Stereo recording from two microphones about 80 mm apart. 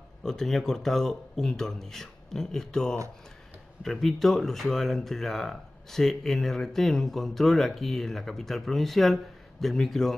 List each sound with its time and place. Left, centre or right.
0.2 s speech: centre